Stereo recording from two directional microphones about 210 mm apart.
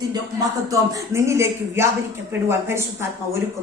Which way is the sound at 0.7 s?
15° right (ahead or behind).